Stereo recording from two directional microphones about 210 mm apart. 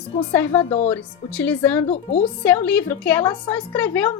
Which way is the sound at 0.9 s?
5° left (ahead or behind).